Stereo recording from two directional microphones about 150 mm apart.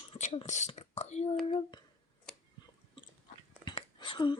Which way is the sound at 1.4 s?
35° left (ahead or behind).